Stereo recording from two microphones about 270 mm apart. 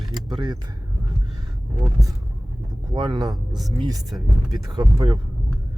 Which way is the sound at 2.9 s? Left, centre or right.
Centre.